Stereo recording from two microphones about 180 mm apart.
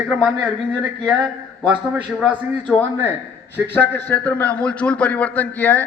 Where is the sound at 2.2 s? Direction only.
5° left (ahead or behind).